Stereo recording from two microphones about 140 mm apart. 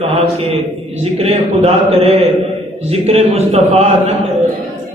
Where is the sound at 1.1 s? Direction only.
45° right (ahead or behind).